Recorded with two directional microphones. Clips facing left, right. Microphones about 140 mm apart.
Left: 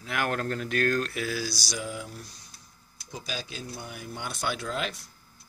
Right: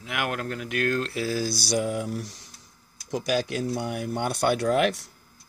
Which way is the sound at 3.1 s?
80° right.